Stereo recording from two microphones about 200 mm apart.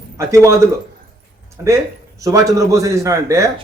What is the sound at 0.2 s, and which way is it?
Speech, 15° right (ahead or behind).